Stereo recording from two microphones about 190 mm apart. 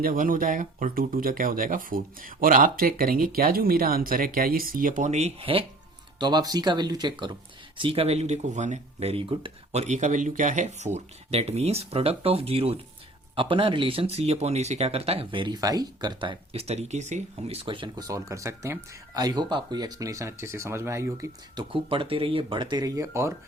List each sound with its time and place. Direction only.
0.0 s speech: 45° right (ahead or behind); by 23.3 s 15° right (ahead or behind)